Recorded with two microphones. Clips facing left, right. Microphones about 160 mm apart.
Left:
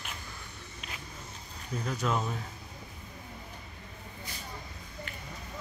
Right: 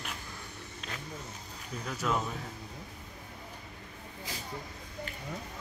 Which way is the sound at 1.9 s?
Centre (ahead or behind).